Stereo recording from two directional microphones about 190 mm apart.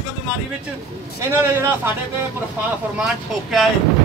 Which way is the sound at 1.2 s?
15° right (ahead or behind).